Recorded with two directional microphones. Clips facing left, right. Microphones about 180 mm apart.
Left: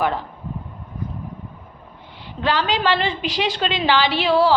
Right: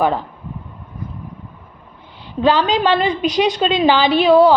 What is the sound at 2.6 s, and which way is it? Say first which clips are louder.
A woman's voice: right 4 dB; 20° right (ahead or behind).